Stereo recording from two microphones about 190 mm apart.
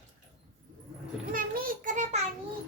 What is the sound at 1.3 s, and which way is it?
Child singing, 50° right (ahead or behind).